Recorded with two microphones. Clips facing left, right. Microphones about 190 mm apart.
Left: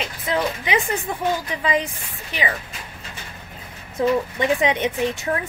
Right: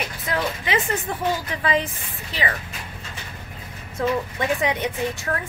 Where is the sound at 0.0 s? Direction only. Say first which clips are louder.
Left 2 dB; 20° left (ahead or behind).